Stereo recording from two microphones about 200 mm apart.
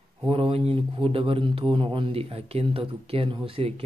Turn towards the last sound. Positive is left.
turn(degrees=-30)  # may be behind; listen again after turning